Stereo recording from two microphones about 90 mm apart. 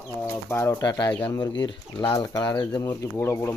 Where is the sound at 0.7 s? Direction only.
45° left (ahead or behind).